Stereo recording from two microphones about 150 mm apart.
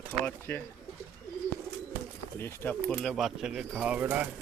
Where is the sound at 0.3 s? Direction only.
15° left (ahead or behind).